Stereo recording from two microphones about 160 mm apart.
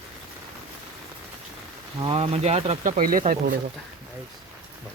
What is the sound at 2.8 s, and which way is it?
Speech, 60° right (ahead or behind).